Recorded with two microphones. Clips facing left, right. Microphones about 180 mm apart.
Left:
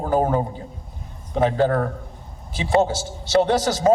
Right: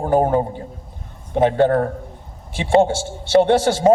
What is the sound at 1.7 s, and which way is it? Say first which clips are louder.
A man's voice: right 4 dB; 35° right (ahead or behind).